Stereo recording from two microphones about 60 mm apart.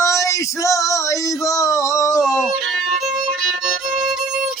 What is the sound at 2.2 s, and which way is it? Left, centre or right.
Music, centre.